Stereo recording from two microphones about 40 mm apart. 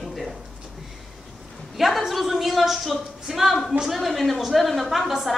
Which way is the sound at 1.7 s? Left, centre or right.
Centre.